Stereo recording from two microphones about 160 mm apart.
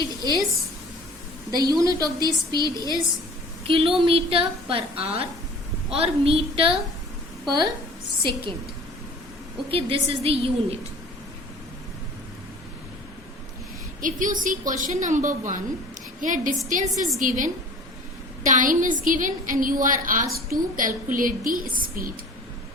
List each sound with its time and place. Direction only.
0.2 s a woman's voice: 25° right (ahead or behind)
1.5 s a woman's voice: 25° right (ahead or behind)
9.6 s a woman's voice: 35° right (ahead or behind)
14.0 s a woman's voice: 55° right (ahead or behind)